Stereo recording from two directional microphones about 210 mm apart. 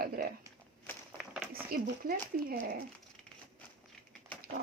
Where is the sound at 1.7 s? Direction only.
45° right (ahead or behind).